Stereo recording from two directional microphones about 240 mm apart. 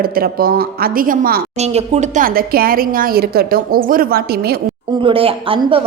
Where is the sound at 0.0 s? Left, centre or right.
Right.